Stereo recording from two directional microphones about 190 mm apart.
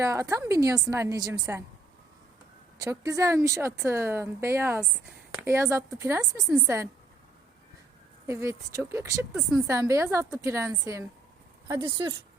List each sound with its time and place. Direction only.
0.0 s speech: 15° right (ahead or behind)
2.7 s speech: 15° right (ahead or behind)
8.3 s speech: 15° right (ahead or behind)